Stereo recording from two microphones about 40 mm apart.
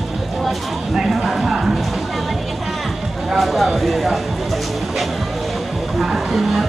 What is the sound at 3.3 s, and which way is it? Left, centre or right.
Speech, centre.